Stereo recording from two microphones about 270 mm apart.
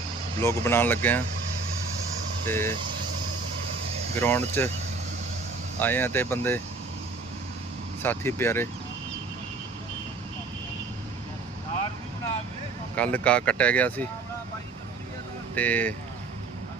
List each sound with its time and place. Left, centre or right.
0.3 s speech: centre
2.5 s speech: centre
4.2 s speech: centre
5.8 s speech: centre
8.0 s speech: centre
13.0 s speech: centre
15.5 s speech: centre